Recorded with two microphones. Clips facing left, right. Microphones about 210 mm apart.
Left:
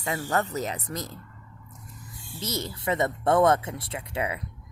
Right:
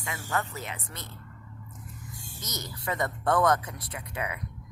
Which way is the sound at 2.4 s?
30° left (ahead or behind).